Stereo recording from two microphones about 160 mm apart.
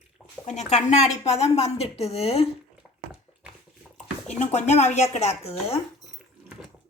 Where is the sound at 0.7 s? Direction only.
45° left (ahead or behind).